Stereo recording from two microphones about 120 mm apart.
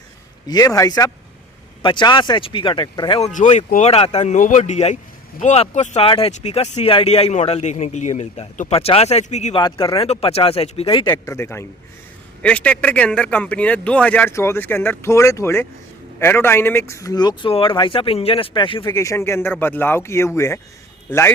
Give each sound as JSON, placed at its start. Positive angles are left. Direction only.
{"t": 0.4, "sound": "speech", "side_deg": 30}
{"t": 3.2, "sound": "speech", "side_deg": 75}
{"t": 3.8, "sound": "speech", "side_deg": 60}
{"t": 6.1, "sound": "speech", "side_deg": 55}
{"t": 9.6, "sound": "speech", "side_deg": 40}
{"t": 10.1, "sound": "speech", "side_deg": 55}
{"t": 11.3, "sound": "speech", "side_deg": 20}
{"t": 12.4, "sound": "speech", "side_deg": 10}
{"t": 18.9, "sound": "speech", "side_deg": 25}